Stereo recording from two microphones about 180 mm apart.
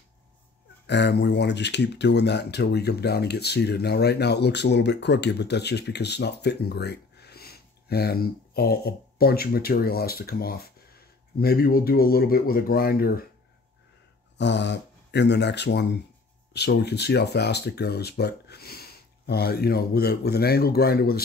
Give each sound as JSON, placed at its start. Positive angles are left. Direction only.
{"t": 0.8, "sound": "speech", "side_deg": 70}
{"t": 14.4, "sound": "speech", "side_deg": 75}